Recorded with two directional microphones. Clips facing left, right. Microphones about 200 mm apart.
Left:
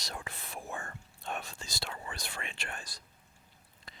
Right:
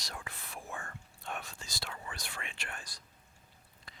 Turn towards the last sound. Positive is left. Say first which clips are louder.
# left 2 dB
turn(degrees=25)  # may be behind; listen again after turning